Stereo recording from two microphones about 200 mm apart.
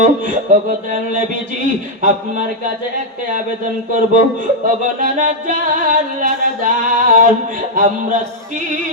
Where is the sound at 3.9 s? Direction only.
40° right (ahead or behind).